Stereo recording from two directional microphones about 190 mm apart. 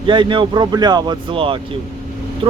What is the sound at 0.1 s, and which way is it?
Speech, 25° right (ahead or behind).